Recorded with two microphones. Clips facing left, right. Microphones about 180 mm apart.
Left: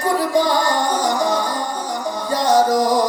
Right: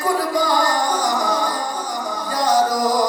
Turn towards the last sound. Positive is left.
turn(degrees=25)  # may be behind; listen again after turning